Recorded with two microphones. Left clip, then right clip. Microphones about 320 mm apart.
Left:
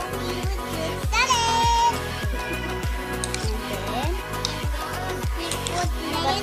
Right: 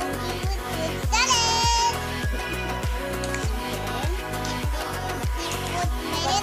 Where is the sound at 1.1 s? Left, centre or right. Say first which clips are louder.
Left 1 dB; left.